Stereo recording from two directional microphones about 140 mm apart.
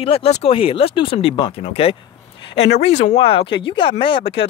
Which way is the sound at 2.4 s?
40° left (ahead or behind).